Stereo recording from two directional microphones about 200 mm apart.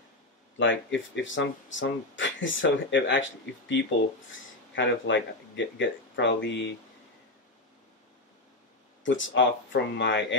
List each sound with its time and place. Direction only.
0.6 s speech: 65° left (ahead or behind)
9.0 s speech: 70° left (ahead or behind)